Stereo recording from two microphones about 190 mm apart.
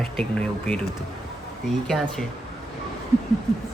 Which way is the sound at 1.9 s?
Centre (ahead or behind).